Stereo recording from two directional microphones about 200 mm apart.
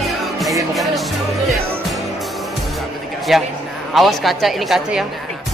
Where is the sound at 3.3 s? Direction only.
Centre (ahead or behind).